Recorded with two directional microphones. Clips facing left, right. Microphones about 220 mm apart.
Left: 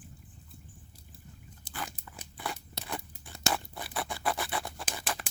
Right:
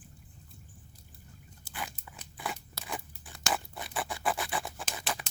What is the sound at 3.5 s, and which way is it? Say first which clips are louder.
Scratch: even; centre (ahead or behind).